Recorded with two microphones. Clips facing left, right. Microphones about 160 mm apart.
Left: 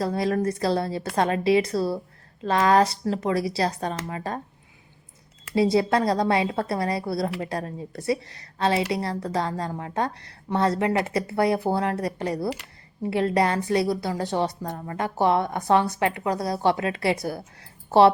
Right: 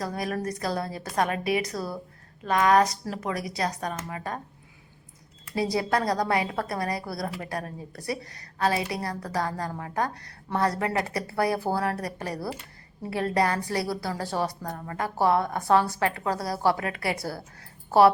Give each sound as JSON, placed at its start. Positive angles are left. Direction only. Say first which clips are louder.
{"t": 0.0, "sound": "a woman's voice", "louder": "left 6 dB", "side_deg": 30}
{"t": 5.5, "sound": "a woman's voice", "louder": "left 5 dB", "side_deg": 25}